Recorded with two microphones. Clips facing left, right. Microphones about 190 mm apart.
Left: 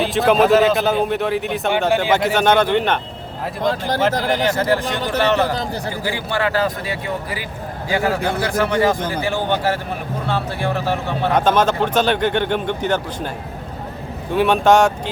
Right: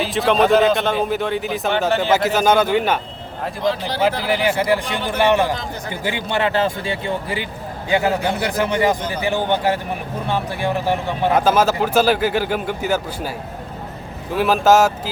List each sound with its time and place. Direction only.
0.0 s speech: centre (ahead or behind)
1.9 s speech: 10° left (ahead or behind)
2.1 s speech: 5° right (ahead or behind)
3.7 s a man's voice: 50° left (ahead or behind)
5.1 s a man's voice: 15° right (ahead or behind)